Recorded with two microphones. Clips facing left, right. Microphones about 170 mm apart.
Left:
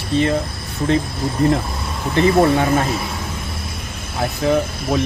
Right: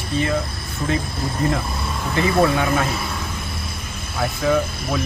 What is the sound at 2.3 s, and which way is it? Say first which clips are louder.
Speech: left 2 dB; 30° left (ahead or behind).